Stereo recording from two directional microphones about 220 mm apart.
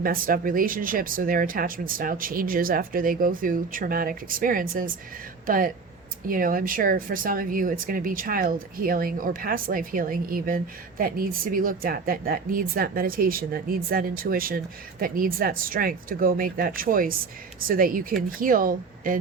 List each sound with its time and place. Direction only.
0.0 s speech: 40° right (ahead or behind)